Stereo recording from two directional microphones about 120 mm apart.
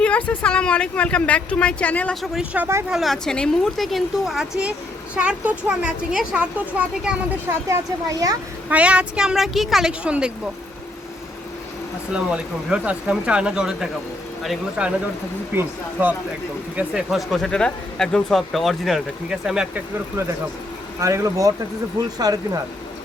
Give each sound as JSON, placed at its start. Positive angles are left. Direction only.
{"t": 0.0, "sound": "speech", "side_deg": 10}
{"t": 2.2, "sound": "speech", "side_deg": -5}
{"t": 2.9, "sound": "speech", "side_deg": 0}
{"t": 7.7, "sound": "speech", "side_deg": -30}
{"t": 8.7, "sound": "speech", "side_deg": -10}
{"t": 12.1, "sound": "speech", "side_deg": -10}
{"t": 16.7, "sound": "speech", "side_deg": -5}
{"t": 21.0, "sound": "speech", "side_deg": -25}